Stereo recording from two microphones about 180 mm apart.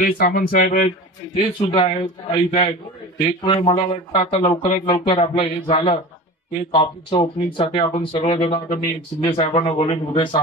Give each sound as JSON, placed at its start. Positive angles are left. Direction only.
{"t": 0.0, "sound": "a man's voice", "side_deg": 50}
{"t": 8.4, "sound": "speech", "side_deg": 40}
{"t": 9.4, "sound": "speech", "side_deg": 30}